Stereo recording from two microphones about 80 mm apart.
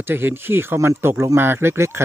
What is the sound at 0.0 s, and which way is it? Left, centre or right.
Speech, right.